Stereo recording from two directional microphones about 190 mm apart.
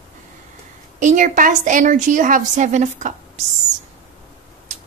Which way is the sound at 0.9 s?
40° right (ahead or behind).